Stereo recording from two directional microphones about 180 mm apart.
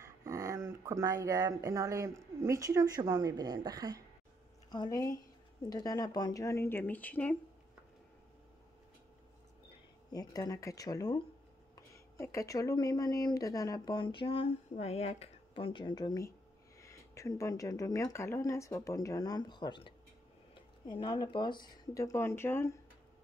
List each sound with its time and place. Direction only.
0.0 s speech: 15° right (ahead or behind)
4.6 s speech: 20° left (ahead or behind)
10.1 s speech: 20° left (ahead or behind)